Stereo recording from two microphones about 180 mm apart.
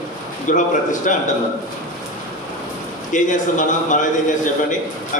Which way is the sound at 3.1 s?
45° left (ahead or behind).